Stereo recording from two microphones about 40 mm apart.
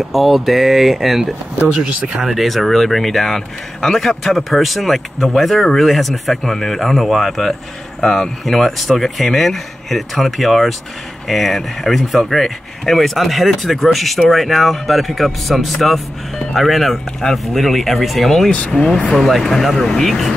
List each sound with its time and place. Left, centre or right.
0.1 s a man's voice: centre
1.6 s speech: right
2.2 s a man's voice: centre
18.7 s speech: centre
19.1 s a man's voice: centre